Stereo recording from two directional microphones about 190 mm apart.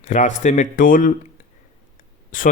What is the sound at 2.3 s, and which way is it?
Speech, 45° left (ahead or behind).